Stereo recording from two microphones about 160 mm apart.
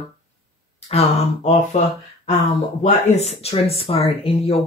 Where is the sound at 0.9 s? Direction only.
45° left (ahead or behind).